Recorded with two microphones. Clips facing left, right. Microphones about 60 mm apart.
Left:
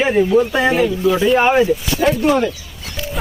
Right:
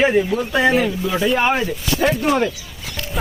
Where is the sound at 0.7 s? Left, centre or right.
Centre.